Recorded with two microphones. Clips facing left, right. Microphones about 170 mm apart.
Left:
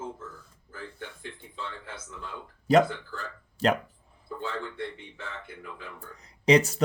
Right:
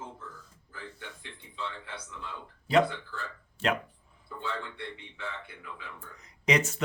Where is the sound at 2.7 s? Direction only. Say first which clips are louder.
Left 3 dB; 45° left (ahead or behind).